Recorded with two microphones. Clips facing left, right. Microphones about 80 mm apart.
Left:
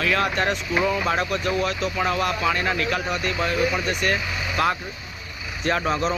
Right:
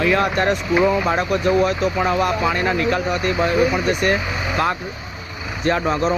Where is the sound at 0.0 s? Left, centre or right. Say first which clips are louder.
Right 5 dB; centre.